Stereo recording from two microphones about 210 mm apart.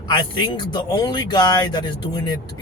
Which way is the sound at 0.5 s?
20° left (ahead or behind).